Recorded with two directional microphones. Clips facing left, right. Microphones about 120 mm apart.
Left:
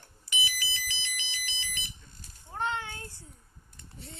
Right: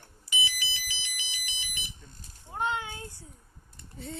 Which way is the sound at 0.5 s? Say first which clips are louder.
Left 1 dB; 15° right (ahead or behind).